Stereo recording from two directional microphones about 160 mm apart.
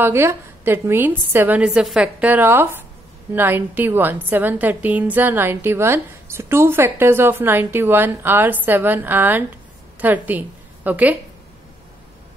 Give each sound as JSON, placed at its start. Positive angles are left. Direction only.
{"t": 0.0, "sound": "a woman's voice", "side_deg": -15}